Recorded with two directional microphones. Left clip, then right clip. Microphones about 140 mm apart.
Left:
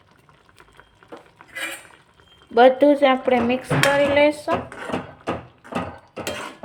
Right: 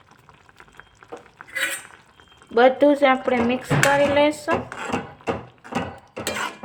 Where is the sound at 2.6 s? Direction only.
Centre (ahead or behind).